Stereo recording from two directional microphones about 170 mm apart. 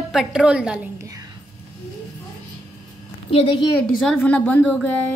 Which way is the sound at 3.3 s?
30° left (ahead or behind).